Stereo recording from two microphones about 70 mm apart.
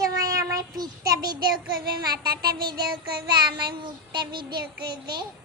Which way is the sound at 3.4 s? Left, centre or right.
Right.